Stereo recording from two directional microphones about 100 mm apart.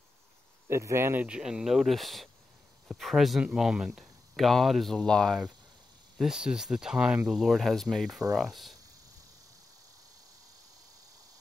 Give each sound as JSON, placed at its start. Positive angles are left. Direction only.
{"t": 0.7, "sound": "speech", "side_deg": -25}
{"t": 1.2, "sound": "speech", "side_deg": -10}
{"t": 6.1, "sound": "speech", "side_deg": -5}